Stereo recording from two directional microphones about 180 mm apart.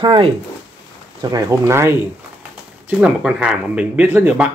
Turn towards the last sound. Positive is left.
turn(degrees=-10)  # may be behind; listen again after turning